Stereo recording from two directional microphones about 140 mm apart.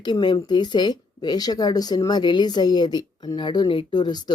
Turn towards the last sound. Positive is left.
turn(degrees=30)  # may be behind; listen again after turning